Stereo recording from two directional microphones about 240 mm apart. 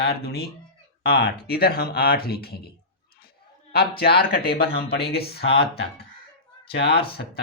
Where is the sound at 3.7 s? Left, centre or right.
Left.